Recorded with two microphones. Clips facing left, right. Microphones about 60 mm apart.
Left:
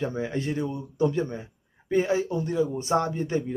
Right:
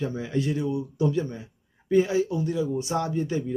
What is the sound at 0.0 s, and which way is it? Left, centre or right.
Speech, left.